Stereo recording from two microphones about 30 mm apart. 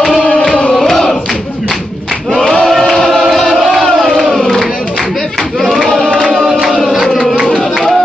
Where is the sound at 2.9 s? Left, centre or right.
Centre.